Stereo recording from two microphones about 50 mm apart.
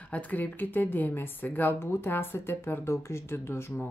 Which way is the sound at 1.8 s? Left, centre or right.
Left.